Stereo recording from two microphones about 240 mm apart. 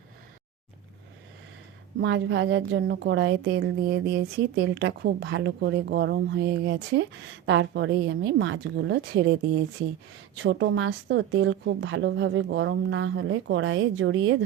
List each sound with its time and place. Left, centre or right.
2.0 s a woman's voice: right
10.4 s a woman's voice: right